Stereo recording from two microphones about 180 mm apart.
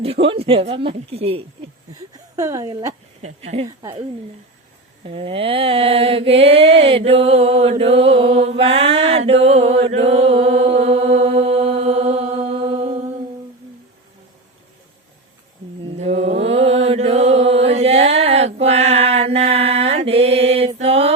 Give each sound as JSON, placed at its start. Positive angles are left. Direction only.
{"t": 0.0, "sound": "mantra", "side_deg": -30}
{"t": 2.1, "sound": "speech", "side_deg": -15}
{"t": 3.5, "sound": "mantra", "side_deg": -30}
{"t": 5.0, "sound": "mantra", "side_deg": -30}
{"t": 15.8, "sound": "mantra", "side_deg": -35}
{"t": 16.1, "sound": "mantra", "side_deg": -90}
{"t": 16.5, "sound": "mantra", "side_deg": -35}